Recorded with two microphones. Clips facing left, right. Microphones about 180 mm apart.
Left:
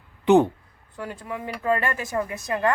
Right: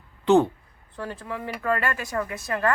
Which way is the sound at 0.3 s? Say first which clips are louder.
Left 1 dB; 15° left (ahead or behind).